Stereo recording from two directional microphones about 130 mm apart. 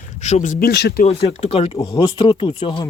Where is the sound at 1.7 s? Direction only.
25° left (ahead or behind).